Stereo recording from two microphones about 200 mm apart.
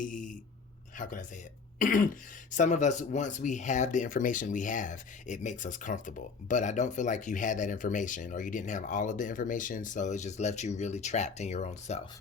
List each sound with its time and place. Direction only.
0.0 s speech: 40° left (ahead or behind)